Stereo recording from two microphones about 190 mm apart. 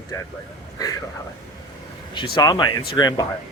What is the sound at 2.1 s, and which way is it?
Speech, 25° left (ahead or behind).